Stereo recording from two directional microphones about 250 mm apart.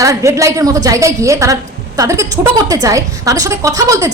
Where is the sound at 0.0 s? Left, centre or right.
Centre.